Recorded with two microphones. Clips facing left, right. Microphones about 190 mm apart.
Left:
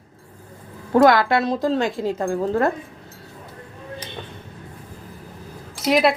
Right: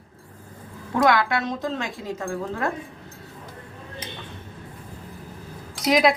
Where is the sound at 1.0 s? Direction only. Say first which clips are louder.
Left 4 dB; 35° left (ahead or behind).